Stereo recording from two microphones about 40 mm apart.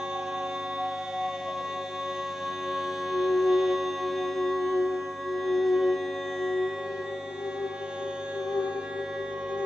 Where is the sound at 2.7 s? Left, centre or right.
Centre.